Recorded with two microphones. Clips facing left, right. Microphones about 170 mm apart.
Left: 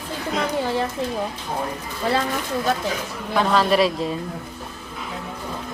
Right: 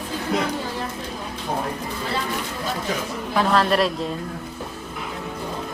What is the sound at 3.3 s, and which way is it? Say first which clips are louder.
Speech: left 1 dB; centre (ahead or behind).